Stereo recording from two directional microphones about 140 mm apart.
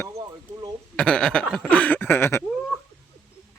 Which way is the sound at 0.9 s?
5° left (ahead or behind).